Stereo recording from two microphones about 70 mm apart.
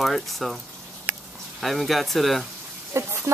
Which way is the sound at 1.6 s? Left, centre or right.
Centre.